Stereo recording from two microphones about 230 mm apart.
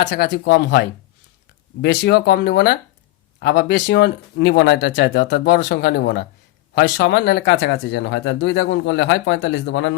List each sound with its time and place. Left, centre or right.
0.0 s speech: left